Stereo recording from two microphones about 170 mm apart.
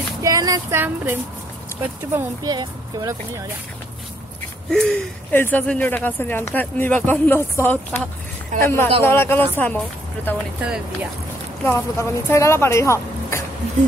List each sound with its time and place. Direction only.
0.2 s speech: 20° right (ahead or behind)
2.1 s speech: 25° right (ahead or behind)
4.6 s a sound: 5° left (ahead or behind)
5.4 s speech: 10° left (ahead or behind)
10.6 s speech: 5° right (ahead or behind)
11.6 s speech: 15° left (ahead or behind)